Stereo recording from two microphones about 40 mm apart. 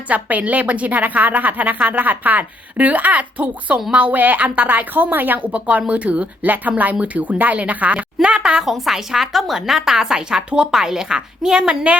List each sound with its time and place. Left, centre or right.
0.1 s a woman's voice: right
5.5 s speech: right
8.2 s a woman's voice: right
8.6 s a woman's voice: centre; by 11.9 s right